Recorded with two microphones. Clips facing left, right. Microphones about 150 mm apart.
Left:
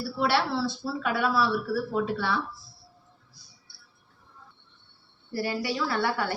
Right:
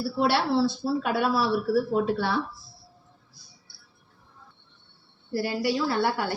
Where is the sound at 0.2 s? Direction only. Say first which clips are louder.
Right 3 dB; 35° right (ahead or behind).